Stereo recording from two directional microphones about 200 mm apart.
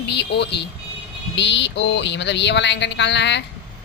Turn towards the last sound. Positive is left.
turn(degrees=60)  # may be behind; listen again after turning